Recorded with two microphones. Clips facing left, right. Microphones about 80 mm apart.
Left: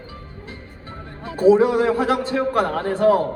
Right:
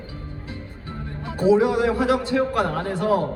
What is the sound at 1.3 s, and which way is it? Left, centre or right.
A man's voice, left.